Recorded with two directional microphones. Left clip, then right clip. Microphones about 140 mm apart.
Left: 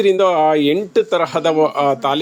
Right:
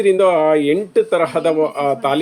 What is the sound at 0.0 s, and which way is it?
Speech, 35° left (ahead or behind).